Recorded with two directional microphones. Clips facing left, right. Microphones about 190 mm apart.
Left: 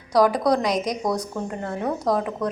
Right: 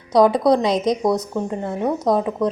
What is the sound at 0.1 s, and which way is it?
A woman's voice, 25° right (ahead or behind).